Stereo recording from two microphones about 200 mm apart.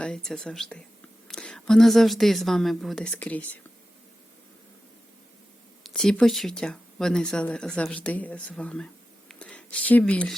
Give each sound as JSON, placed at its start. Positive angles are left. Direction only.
{"t": 0.0, "sound": "speech", "side_deg": 5}
{"t": 5.8, "sound": "speech", "side_deg": 0}